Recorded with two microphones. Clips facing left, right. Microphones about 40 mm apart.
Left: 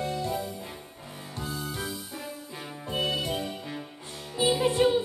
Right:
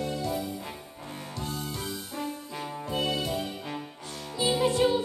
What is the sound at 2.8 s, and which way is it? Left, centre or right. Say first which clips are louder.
Music: left 1 dB; left.